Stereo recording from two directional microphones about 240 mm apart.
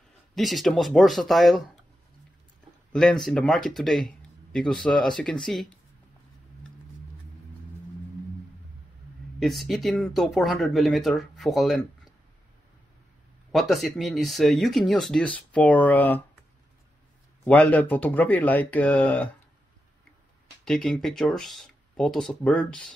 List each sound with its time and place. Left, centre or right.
0.3 s speech: centre
2.9 s speech: centre
9.4 s speech: centre
13.5 s speech: centre
17.5 s speech: centre
20.6 s speech: centre